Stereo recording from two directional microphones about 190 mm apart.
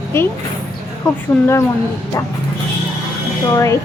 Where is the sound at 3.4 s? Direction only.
15° left (ahead or behind).